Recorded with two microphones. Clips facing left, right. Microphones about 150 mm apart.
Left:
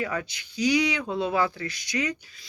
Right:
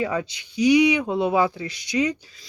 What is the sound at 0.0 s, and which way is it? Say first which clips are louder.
Speech: right 5 dB; 25° right (ahead or behind).